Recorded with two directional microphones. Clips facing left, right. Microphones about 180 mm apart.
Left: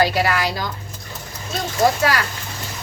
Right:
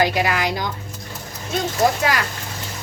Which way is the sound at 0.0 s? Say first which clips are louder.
Left 1 dB; 15° right (ahead or behind).